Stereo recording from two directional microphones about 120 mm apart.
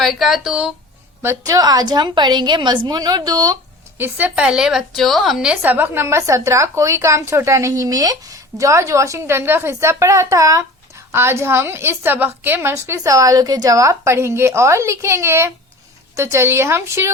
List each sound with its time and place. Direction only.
0.0 s speech: centre (ahead or behind)
1.2 s a woman's voice: 25° right (ahead or behind)
3.9 s a woman's voice: 15° right (ahead or behind)